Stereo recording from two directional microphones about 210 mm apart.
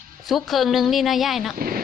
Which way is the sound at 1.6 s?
45° right (ahead or behind).